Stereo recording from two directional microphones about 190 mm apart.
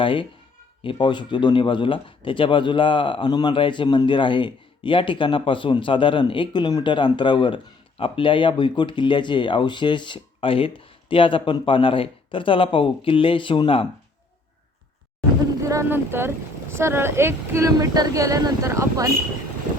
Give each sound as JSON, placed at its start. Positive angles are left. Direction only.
{"t": 0.0, "sound": "speech", "side_deg": 25}
{"t": 15.7, "sound": "speech", "side_deg": -15}